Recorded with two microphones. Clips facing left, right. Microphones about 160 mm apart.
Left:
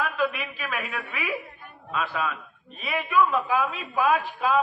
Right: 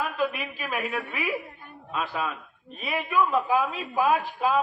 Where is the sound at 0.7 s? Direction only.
40° right (ahead or behind).